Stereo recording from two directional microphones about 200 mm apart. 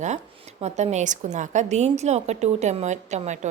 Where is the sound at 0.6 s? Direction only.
35° right (ahead or behind).